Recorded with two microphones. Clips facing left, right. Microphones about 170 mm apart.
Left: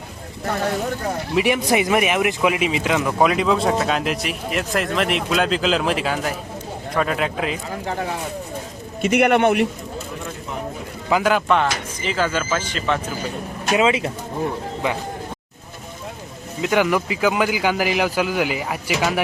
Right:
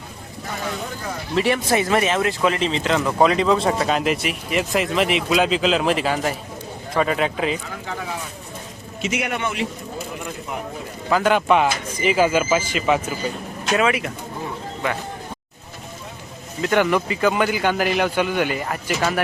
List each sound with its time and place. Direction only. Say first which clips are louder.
0.4 s a sound: left 7 dB; 60° left (ahead or behind)
1.4 s a man's voice: left 1 dB; 15° left (ahead or behind); by 7.6 s centre (ahead or behind)
9.0 s a man's voice: left 9 dB; 60° left (ahead or behind)
11.2 s speech: right 2 dB; centre (ahead or behind)
13.7 s speech: left 2 dB; 25° left (ahead or behind)
16.6 s a man's voice: even; 10° left (ahead or behind)